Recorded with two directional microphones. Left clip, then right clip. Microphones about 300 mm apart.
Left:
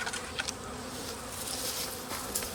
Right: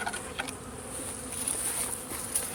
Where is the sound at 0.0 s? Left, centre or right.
Centre.